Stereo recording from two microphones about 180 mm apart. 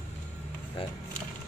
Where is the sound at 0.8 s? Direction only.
30° left (ahead or behind).